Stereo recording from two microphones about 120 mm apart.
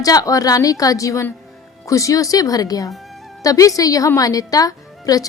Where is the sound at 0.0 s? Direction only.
30° left (ahead or behind).